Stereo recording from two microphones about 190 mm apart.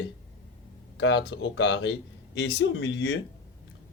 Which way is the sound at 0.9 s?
65° left (ahead or behind).